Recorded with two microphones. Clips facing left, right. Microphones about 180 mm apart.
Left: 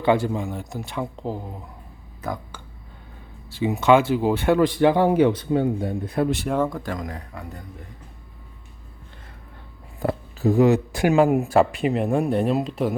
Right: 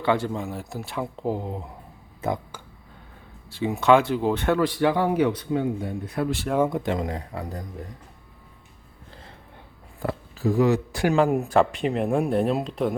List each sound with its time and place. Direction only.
0.0 s speech: 15° left (ahead or behind)
0.3 s speech: centre (ahead or behind)
1.3 s speech: 20° right (ahead or behind)
3.5 s speech: centre (ahead or behind)
4.6 s a man's voice: 20° left (ahead or behind)
6.7 s speech: 25° right (ahead or behind)
10.0 s speech: 20° left (ahead or behind); by 13.0 s 5° left (ahead or behind)